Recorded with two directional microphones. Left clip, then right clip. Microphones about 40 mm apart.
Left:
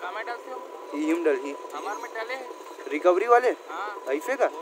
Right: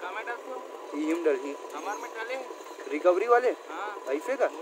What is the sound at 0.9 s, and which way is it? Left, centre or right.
Speech, left.